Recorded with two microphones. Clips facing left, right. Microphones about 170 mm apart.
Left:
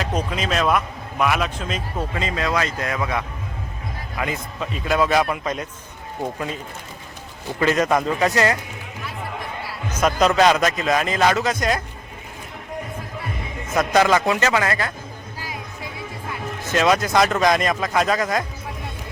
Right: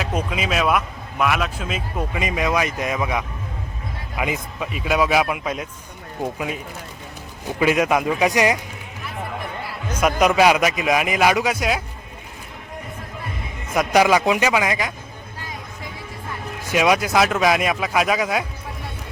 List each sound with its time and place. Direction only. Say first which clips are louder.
0.0 s speech: even; 5° right (ahead or behind)
7.6 s speech: right 1 dB; 10° right (ahead or behind)
9.9 s speech: even; 10° right (ahead or behind)
13.7 s speech: right 1 dB; 10° right (ahead or behind)
16.6 s speech: even; 10° right (ahead or behind)